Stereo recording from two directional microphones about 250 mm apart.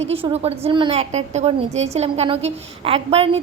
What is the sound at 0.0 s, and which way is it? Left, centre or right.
A woman's voice, right.